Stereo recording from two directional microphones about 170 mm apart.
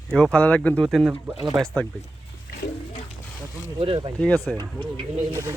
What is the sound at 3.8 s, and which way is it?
Speech, 30° right (ahead or behind).